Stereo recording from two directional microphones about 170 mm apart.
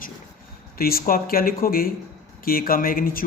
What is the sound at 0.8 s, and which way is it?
A man's voice, 60° left (ahead or behind).